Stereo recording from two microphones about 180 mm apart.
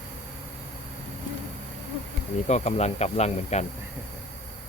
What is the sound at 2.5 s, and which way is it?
Speech, 35° left (ahead or behind).